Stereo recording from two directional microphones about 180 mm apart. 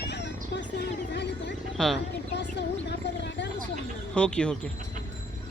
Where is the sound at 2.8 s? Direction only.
75° left (ahead or behind).